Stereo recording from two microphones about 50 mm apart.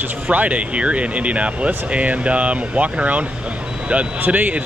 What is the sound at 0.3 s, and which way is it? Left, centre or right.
Speech, right.